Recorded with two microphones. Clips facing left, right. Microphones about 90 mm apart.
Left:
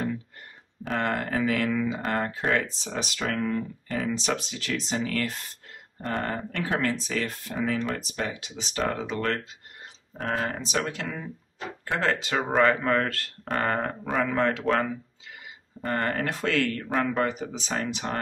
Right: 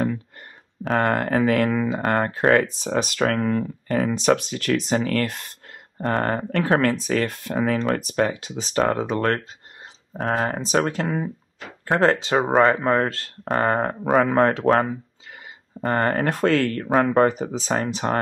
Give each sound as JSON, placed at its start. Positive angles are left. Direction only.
{"t": 0.8, "sound": "speech", "side_deg": -50}
{"t": 14.1, "sound": "speech", "side_deg": -45}